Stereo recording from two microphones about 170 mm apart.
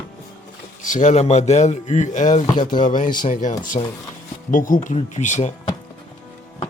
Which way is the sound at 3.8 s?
35° left (ahead or behind).